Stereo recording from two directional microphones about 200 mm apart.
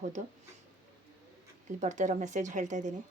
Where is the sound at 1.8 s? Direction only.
35° right (ahead or behind).